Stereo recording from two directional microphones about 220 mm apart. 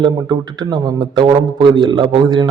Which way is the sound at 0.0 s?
20° right (ahead or behind).